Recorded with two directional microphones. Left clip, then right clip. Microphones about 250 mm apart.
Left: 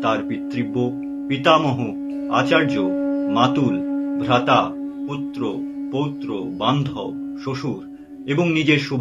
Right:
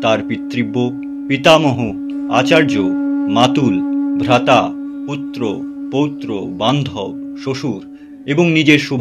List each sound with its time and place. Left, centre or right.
0.0 s speech: right
8.3 s speech: right